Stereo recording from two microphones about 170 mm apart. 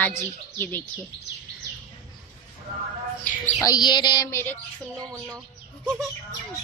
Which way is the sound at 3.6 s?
25° left (ahead or behind).